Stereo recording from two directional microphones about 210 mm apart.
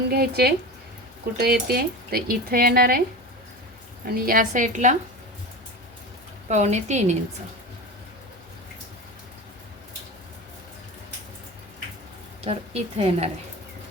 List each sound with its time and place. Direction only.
0.1 s speech: 50° right (ahead or behind)
4.0 s speech: 45° right (ahead or behind)
6.5 s a woman's voice: 35° right (ahead or behind)
12.5 s a woman's voice: 30° right (ahead or behind)